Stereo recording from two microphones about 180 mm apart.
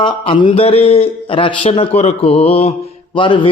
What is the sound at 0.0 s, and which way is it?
A man's voice, 25° left (ahead or behind).